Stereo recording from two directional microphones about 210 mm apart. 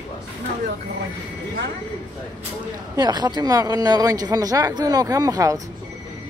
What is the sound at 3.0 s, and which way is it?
Speech, 20° right (ahead or behind).